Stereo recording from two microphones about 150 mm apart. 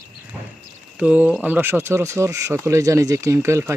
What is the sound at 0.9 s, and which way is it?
Speech, 10° right (ahead or behind).